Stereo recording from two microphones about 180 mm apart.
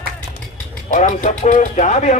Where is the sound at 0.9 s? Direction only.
40° left (ahead or behind).